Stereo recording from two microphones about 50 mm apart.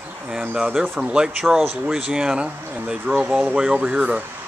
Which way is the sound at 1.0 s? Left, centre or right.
Centre.